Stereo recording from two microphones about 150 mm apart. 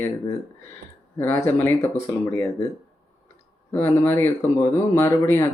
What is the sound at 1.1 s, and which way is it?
Speech, 15° left (ahead or behind).